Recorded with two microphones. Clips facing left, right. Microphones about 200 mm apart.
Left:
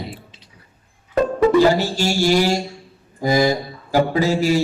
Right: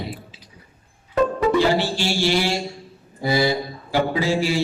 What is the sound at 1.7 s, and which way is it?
Mantra, 40° left (ahead or behind).